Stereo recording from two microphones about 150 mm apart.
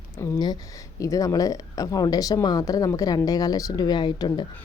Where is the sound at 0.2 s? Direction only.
25° left (ahead or behind).